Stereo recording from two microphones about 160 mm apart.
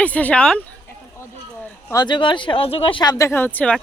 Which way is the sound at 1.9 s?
25° left (ahead or behind).